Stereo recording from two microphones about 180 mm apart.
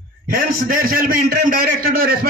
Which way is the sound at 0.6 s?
50° right (ahead or behind).